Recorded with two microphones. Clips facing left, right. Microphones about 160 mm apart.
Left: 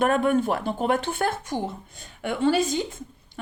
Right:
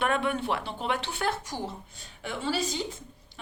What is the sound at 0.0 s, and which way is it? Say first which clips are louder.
Speech: left 7 dB; 45° left (ahead or behind).